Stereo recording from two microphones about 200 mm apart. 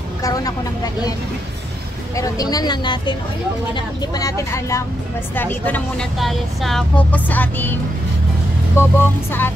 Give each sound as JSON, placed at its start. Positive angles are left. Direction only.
{"t": 0.2, "sound": "a woman's voice", "side_deg": 20}
{"t": 2.1, "sound": "a woman's voice", "side_deg": 15}
{"t": 8.7, "sound": "speech", "side_deg": 10}